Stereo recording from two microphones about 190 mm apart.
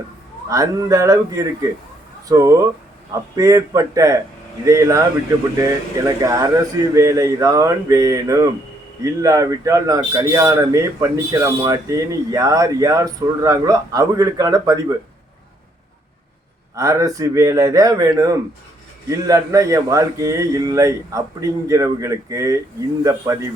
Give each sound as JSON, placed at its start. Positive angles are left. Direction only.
{"t": 0.5, "sound": "a man's voice", "side_deg": -15}
{"t": 6.1, "sound": "a man's voice", "side_deg": -15}
{"t": 16.7, "sound": "a man's voice", "side_deg": -15}